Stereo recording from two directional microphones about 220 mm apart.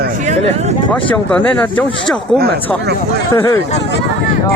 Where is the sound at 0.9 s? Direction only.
5° left (ahead or behind).